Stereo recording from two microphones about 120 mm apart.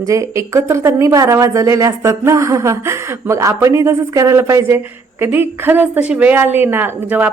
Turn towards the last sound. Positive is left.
turn(degrees=-15)  # may be behind; listen again after turning